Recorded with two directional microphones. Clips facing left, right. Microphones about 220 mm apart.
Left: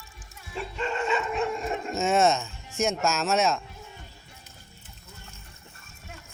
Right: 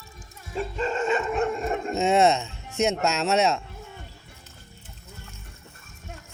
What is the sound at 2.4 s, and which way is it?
Speech, 65° right (ahead or behind).